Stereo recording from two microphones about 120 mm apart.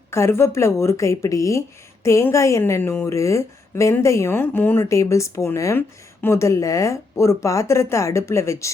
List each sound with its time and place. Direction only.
0.1 s a woman's voice: 20° left (ahead or behind)